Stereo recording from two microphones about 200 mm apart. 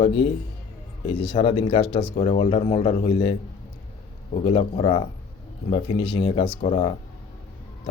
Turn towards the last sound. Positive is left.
turn(degrees=30)  # may be behind; listen again after turning